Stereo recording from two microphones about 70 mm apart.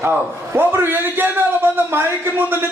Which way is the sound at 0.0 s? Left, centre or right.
Right.